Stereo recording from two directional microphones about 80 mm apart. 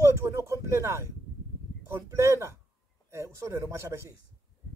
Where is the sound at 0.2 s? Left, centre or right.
Right.